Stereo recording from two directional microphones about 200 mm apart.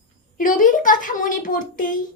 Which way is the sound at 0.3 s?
40° left (ahead or behind).